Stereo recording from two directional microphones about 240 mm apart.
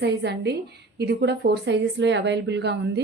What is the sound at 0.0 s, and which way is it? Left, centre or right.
A woman's voice, right.